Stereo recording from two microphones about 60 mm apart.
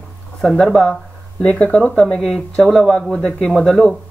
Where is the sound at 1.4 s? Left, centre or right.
Left.